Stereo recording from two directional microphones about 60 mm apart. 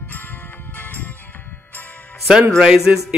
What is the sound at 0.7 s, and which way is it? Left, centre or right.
Music, left.